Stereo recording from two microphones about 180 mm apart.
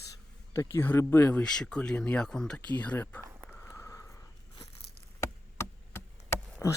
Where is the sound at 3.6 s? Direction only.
15° left (ahead or behind).